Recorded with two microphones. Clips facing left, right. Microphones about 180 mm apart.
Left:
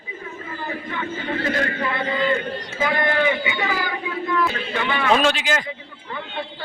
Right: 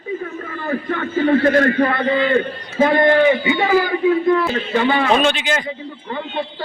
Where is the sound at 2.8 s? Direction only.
40° right (ahead or behind).